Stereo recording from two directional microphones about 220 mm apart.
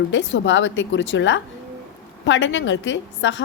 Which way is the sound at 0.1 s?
55° left (ahead or behind).